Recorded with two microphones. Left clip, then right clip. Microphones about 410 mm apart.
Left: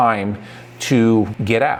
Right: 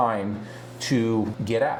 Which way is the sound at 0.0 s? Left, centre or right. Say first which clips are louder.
Left 7 dB; left.